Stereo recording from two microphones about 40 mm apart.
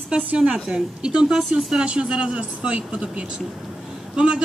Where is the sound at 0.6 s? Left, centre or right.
Right.